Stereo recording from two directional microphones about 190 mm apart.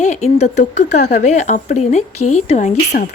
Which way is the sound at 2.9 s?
50° left (ahead or behind).